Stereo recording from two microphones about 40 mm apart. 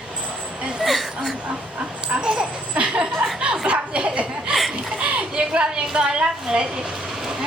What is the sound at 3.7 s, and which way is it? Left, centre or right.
Chuckle, right.